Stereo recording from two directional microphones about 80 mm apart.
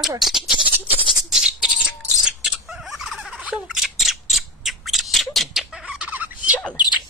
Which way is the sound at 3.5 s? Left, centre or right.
Centre.